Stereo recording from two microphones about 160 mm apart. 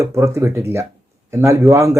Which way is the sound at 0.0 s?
20° right (ahead or behind).